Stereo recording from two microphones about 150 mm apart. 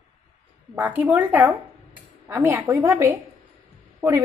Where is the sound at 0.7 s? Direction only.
10° right (ahead or behind).